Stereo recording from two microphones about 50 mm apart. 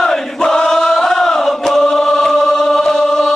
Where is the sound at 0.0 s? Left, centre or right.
Centre.